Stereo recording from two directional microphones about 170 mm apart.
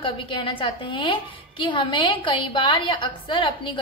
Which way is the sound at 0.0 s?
30° left (ahead or behind).